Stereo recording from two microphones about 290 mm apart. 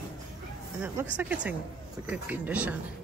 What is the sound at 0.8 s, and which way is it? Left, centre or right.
Speech, centre.